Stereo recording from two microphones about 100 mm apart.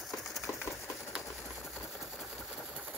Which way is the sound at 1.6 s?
10° left (ahead or behind).